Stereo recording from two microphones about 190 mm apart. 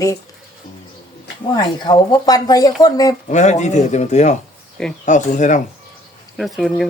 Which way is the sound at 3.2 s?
40° left (ahead or behind).